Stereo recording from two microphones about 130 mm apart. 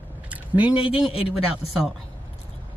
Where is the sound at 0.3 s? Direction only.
10° right (ahead or behind).